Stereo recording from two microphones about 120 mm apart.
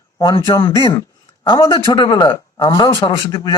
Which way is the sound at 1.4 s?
30° left (ahead or behind).